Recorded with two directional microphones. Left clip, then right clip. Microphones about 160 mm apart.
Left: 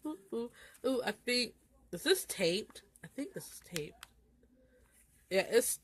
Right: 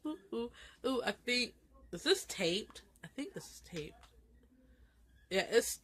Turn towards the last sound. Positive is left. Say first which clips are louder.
# left 2 dB
turn(degrees=30)  # may be behind; listen again after turning